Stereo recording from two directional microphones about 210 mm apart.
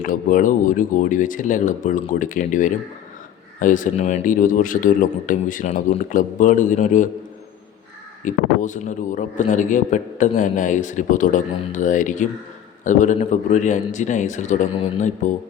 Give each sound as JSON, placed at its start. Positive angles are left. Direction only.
{"t": 0.0, "sound": "a man's voice", "side_deg": 40}
{"t": 8.2, "sound": "a man's voice", "side_deg": 35}